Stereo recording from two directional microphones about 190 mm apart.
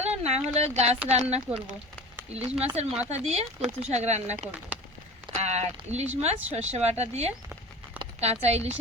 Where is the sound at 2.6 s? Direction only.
35° right (ahead or behind).